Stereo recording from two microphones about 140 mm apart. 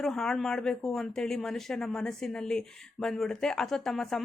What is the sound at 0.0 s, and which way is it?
Speech, 5° left (ahead or behind).